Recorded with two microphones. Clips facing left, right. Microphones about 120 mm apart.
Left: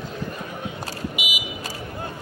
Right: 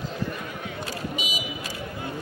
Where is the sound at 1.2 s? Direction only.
10° left (ahead or behind).